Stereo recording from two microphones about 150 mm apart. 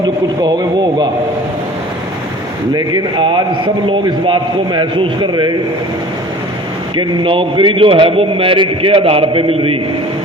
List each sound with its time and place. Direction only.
2.7 s a man's voice: 30° right (ahead or behind)
6.9 s a man's voice: 30° right (ahead or behind)